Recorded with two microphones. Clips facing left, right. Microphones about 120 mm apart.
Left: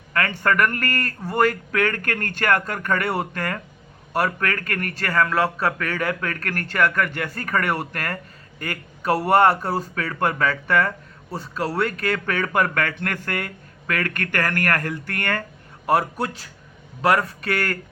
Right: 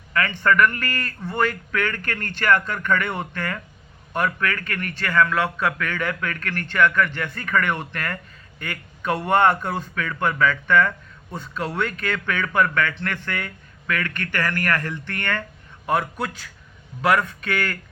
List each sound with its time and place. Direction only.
0.1 s a man's voice: 40° left (ahead or behind)